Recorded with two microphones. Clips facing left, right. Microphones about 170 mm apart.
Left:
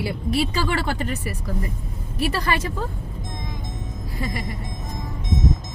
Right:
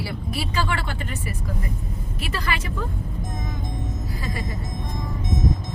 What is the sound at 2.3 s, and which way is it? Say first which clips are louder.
Speech: left 1 dB; 40° left (ahead or behind).